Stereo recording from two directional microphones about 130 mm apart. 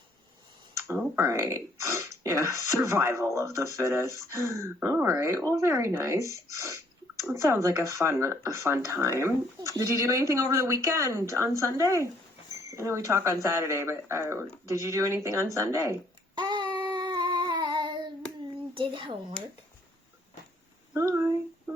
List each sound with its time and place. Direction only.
1.1 s speech: 20° right (ahead or behind)
16.3 s a sound: 35° right (ahead or behind)
18.7 s speech: 40° right (ahead or behind)
20.9 s speech: 20° right (ahead or behind)